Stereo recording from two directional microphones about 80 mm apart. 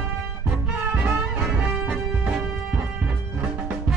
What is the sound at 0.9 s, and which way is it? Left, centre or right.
Music, centre.